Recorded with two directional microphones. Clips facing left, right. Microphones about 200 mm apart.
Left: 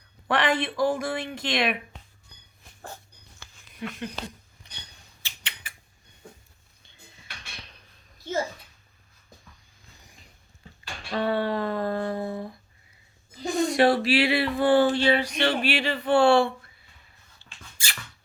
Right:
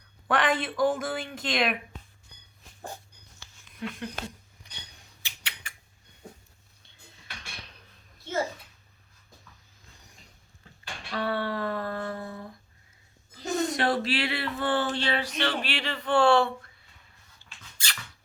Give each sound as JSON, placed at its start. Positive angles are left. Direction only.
{"t": 0.3, "sound": "speech", "side_deg": 0}
{"t": 3.4, "sound": "a sound", "side_deg": 55}
{"t": 3.8, "sound": "speech", "side_deg": 0}
{"t": 5.2, "sound": "rodents", "side_deg": -10}
{"t": 11.1, "sound": "speech", "side_deg": 15}
{"t": 17.8, "sound": "a sound", "side_deg": 10}